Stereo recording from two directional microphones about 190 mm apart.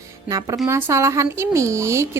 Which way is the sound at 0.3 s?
20° right (ahead or behind).